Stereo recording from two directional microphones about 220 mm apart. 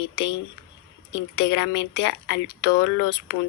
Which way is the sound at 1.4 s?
55° left (ahead or behind).